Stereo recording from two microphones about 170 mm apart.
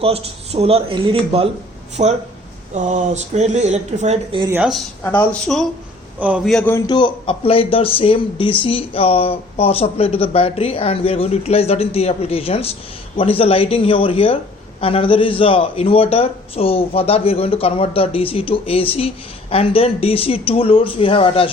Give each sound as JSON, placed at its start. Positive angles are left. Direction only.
{"t": 0.0, "sound": "speech", "side_deg": -35}
{"t": 5.0, "sound": "speech", "side_deg": 10}
{"t": 6.1, "sound": "a man's voice", "side_deg": -5}
{"t": 6.7, "sound": "a man's voice", "side_deg": 20}